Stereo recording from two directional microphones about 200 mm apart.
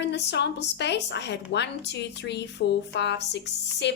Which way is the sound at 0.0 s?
60° left (ahead or behind).